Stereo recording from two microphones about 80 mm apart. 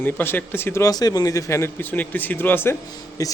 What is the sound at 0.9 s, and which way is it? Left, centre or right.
Speech, left.